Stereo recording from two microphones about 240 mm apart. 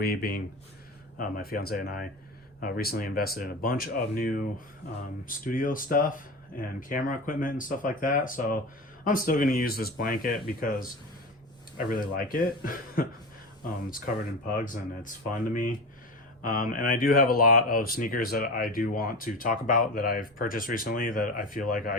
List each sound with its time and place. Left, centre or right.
0.0 s speech: left
14.5 s speech: left